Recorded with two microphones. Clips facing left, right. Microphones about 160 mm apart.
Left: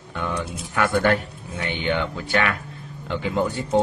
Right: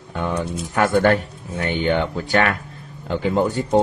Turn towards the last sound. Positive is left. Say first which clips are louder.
# right 3 dB
turn(degrees=-40)  # may be behind; listen again after turning